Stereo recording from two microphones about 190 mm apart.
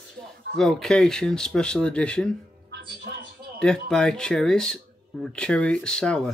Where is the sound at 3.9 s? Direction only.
5° left (ahead or behind).